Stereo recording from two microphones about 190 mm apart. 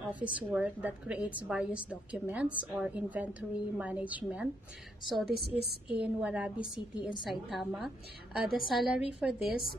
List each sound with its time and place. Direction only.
0.1 s a woman's voice: 10° right (ahead or behind)
5.3 s a woman's voice: 55° right (ahead or behind)
5.9 s a woman's voice: 5° right (ahead or behind)